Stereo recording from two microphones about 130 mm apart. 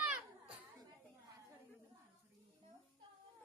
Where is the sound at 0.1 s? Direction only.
10° right (ahead or behind).